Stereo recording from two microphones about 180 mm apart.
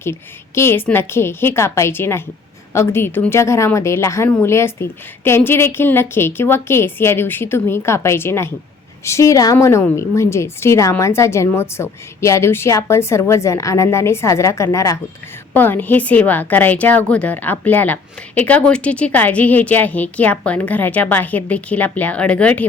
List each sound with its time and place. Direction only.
0.0 s a woman's voice: 15° left (ahead or behind)